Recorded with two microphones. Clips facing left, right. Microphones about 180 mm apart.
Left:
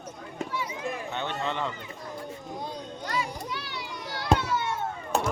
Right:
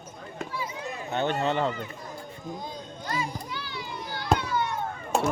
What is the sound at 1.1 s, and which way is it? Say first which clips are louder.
Speech: right 9 dB; 40° right (ahead or behind).